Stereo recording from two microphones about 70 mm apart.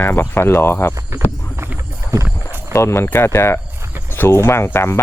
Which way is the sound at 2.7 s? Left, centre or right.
Left.